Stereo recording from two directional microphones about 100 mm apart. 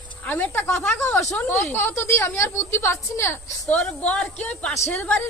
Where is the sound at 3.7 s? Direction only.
15° left (ahead or behind).